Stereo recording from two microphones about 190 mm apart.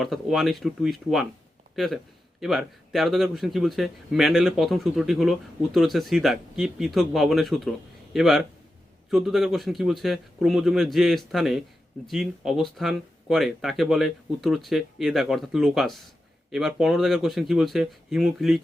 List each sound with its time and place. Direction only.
0.0 s speech: centre (ahead or behind)